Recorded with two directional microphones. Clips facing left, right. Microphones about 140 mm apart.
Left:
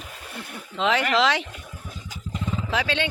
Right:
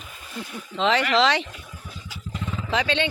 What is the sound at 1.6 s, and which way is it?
Vehicle, 50° left (ahead or behind).